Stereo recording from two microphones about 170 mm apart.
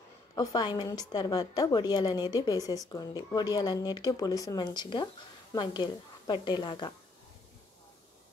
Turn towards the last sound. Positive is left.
turn(degrees=25)  # may be behind; listen again after turning